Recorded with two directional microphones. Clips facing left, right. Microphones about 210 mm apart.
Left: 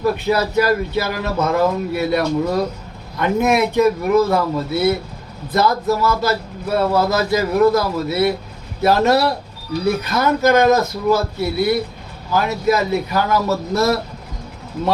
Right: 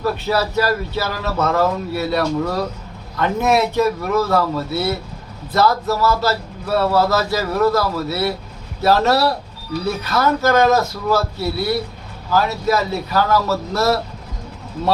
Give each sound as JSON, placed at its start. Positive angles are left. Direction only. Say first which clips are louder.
{"t": 0.0, "sound": "speech", "louder": "left 2 dB", "side_deg": 15}
{"t": 12.3, "sound": "speech", "louder": "left 1 dB", "side_deg": 15}